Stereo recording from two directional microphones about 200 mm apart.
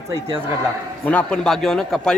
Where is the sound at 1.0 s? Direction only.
5° left (ahead or behind).